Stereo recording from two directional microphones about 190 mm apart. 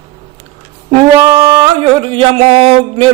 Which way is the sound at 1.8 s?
30° right (ahead or behind).